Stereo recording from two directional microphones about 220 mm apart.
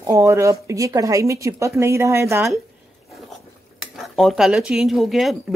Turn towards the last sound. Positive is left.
turn(degrees=0)  # may be behind; listen again after turning